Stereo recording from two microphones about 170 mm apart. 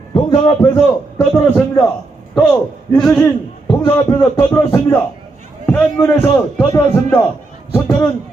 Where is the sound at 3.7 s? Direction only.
20° left (ahead or behind).